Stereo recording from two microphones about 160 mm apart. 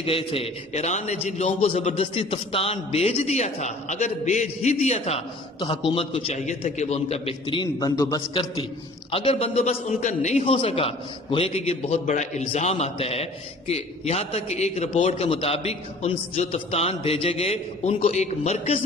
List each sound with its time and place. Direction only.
0.0 s a man's voice: 35° left (ahead or behind)
9.1 s a man's voice: 35° left (ahead or behind)